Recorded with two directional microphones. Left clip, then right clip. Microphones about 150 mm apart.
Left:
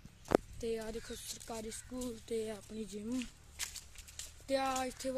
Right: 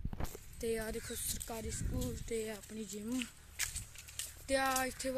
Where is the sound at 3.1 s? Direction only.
20° left (ahead or behind).